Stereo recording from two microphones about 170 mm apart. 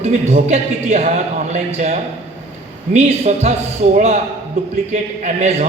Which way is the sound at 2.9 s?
40° right (ahead or behind).